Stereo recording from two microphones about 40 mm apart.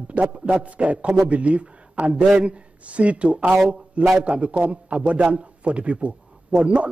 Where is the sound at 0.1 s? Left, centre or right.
Right.